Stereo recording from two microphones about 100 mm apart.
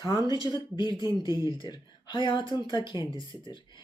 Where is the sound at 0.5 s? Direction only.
50° left (ahead or behind).